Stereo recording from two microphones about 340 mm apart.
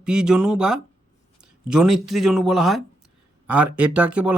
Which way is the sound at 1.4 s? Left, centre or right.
Right.